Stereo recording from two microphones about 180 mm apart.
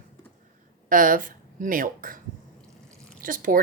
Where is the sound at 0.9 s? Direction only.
50° right (ahead or behind).